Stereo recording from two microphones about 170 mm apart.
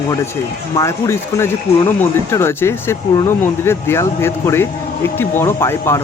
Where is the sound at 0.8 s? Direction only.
15° left (ahead or behind).